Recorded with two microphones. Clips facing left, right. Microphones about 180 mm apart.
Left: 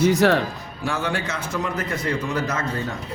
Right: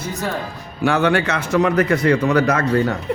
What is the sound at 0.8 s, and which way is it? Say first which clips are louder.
A man's voice: right 9 dB; 70° right (ahead or behind).